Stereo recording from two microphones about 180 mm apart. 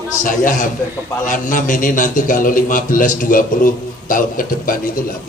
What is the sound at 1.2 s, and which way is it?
A man's voice, 45° left (ahead or behind).